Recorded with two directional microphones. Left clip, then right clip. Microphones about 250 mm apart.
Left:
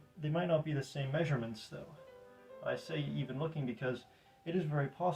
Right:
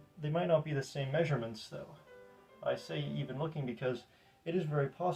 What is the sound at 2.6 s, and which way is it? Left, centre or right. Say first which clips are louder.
Speech: right 2 dB; centre.